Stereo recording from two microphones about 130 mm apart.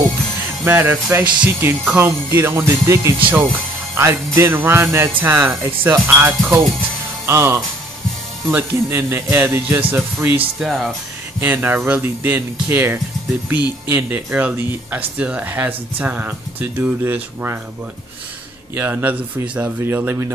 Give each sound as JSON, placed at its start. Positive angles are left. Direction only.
{"t": 0.7, "sound": "speech", "side_deg": -15}
{"t": 1.4, "sound": "music", "side_deg": -15}
{"t": 3.9, "sound": "speech", "side_deg": -20}
{"t": 7.2, "sound": "music", "side_deg": -20}
{"t": 8.5, "sound": "speech", "side_deg": -15}
{"t": 10.6, "sound": "speech", "side_deg": 0}
{"t": 11.3, "sound": "speech", "side_deg": -15}
{"t": 18.8, "sound": "speech", "side_deg": -15}